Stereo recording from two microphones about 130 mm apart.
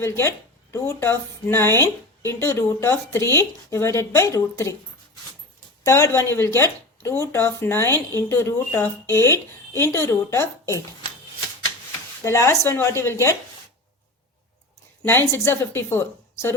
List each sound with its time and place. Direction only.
0.0 s speech: 20° left (ahead or behind)
5.8 s speech: 25° left (ahead or behind)
12.2 s speech: 20° left (ahead or behind)
15.0 s speech: 20° left (ahead or behind)